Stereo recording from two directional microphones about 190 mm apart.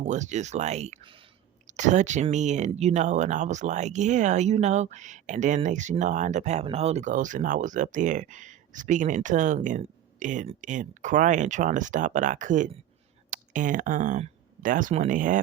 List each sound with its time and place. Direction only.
0.0 s speech: 40° right (ahead or behind)